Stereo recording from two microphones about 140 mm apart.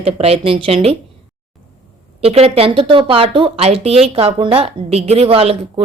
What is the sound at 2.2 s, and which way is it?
Speech, 45° right (ahead or behind).